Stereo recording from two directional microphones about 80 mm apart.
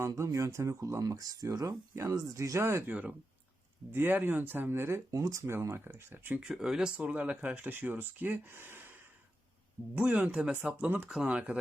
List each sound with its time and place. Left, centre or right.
0.2 s speech: right
2.9 s speech: centre
5.1 s speech: right
6.3 s speech: centre; by 8.9 s right
9.9 s speech: centre